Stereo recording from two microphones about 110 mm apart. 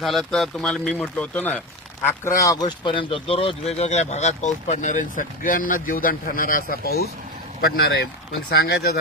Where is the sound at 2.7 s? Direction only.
50° left (ahead or behind); by 4.8 s 90° left.